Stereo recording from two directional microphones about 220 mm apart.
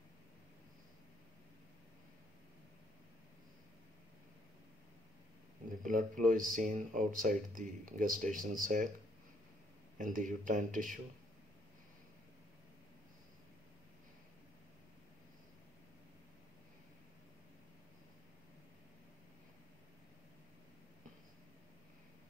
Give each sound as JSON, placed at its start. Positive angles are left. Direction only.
{"t": 5.9, "sound": "speech", "side_deg": -35}
{"t": 9.9, "sound": "speech", "side_deg": -35}